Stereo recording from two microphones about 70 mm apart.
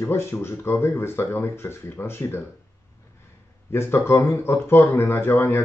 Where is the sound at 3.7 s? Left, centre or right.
Left.